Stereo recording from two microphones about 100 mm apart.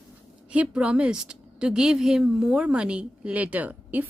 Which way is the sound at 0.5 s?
10° right (ahead or behind).